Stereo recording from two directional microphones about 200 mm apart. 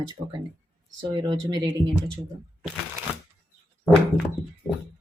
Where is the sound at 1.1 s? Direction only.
20° right (ahead or behind).